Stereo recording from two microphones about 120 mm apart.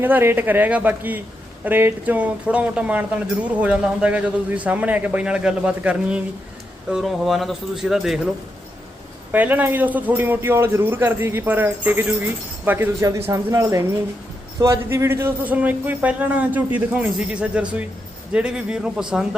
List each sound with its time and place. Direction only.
0.0 s speech: 20° right (ahead or behind); by 8.3 s centre (ahead or behind)
9.3 s speech: 15° right (ahead or behind)